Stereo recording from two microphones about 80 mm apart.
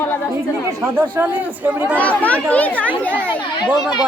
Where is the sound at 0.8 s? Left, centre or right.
Right.